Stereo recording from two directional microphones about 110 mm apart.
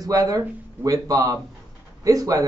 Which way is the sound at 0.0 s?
35° right (ahead or behind).